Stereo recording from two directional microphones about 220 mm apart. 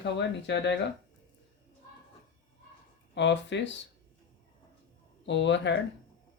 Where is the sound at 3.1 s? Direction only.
55° left (ahead or behind).